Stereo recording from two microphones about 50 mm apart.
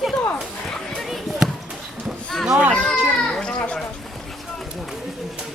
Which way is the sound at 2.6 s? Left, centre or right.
Right.